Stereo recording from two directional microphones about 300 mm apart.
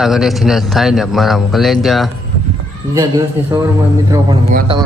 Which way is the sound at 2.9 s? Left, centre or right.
Centre.